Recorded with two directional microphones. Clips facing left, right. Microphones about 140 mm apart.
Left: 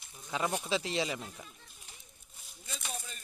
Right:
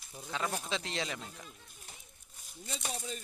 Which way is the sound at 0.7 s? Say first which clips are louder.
Left 4 dB; 5° left (ahead or behind).